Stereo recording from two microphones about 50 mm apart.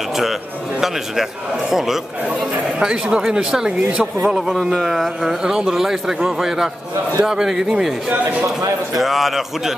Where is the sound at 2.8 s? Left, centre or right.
Centre.